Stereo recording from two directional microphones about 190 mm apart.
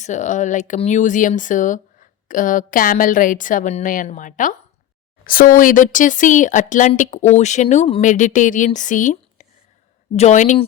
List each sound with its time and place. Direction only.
0.0 s speech: 40° left (ahead or behind)